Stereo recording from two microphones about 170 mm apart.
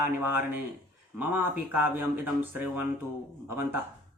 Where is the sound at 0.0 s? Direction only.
10° right (ahead or behind).